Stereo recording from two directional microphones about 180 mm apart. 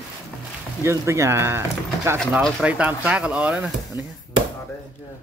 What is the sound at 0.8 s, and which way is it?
Speech, 15° right (ahead or behind).